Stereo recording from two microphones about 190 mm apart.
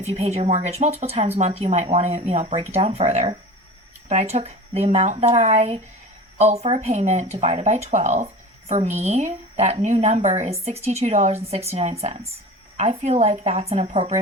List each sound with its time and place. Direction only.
0.0 s speech: 35° right (ahead or behind)